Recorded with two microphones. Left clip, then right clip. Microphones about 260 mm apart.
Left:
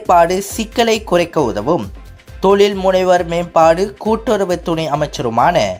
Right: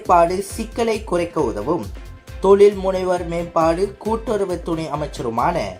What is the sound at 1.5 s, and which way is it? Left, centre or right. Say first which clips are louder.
Speech: left 6 dB; left.